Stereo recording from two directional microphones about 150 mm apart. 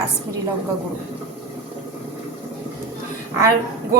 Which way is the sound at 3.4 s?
20° right (ahead or behind).